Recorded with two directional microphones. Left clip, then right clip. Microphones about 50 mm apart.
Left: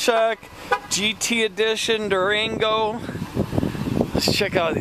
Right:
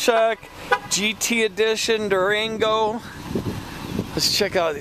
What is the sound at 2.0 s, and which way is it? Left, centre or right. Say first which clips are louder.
Speech: even; right.